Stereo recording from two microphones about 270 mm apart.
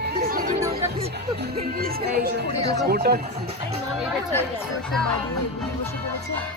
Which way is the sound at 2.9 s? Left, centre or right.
Right.